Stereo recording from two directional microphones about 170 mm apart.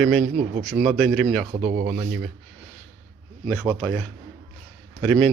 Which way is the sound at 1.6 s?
60° right (ahead or behind).